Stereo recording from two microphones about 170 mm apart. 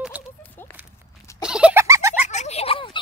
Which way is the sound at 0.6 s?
10° left (ahead or behind).